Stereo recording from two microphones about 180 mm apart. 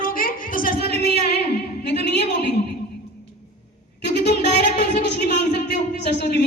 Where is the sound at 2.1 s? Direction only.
70° left (ahead or behind).